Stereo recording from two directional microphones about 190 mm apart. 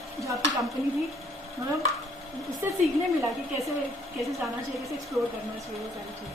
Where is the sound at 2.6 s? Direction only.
10° right (ahead or behind).